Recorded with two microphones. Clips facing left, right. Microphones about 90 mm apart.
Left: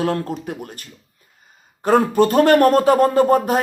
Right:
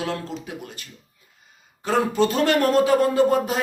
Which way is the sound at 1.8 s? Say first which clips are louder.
Left 5 dB; 50° left (ahead or behind).